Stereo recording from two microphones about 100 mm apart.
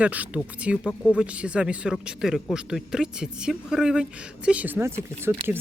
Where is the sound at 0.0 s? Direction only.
15° right (ahead or behind).